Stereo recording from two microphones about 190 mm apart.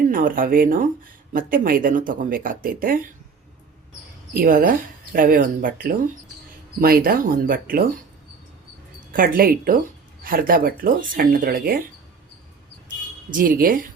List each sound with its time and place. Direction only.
0.1 s speech: 45° right (ahead or behind)
4.4 s speech: 45° right (ahead or behind)
9.1 s speech: 50° right (ahead or behind)
13.3 s speech: 45° right (ahead or behind)